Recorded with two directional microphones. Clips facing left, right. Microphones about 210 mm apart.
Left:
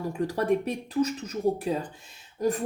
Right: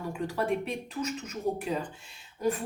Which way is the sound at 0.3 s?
40° left (ahead or behind).